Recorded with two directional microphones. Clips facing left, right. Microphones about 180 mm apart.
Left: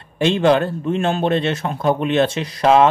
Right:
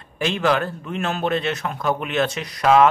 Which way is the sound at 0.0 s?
25° left (ahead or behind).